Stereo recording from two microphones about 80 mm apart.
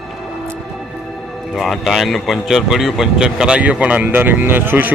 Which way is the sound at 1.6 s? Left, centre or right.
Centre.